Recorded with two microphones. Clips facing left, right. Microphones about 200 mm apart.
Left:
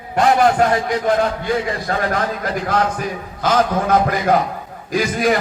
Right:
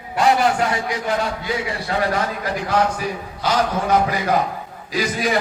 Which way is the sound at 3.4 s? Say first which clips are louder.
Left 4 dB; 50° left (ahead or behind).